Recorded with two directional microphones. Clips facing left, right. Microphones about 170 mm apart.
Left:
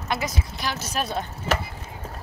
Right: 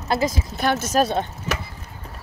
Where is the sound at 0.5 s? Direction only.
50° right (ahead or behind).